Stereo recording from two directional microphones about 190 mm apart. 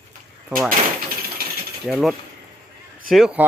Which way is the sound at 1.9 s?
Centre (ahead or behind).